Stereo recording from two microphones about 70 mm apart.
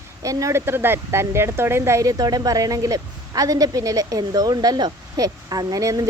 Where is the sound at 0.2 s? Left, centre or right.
Right.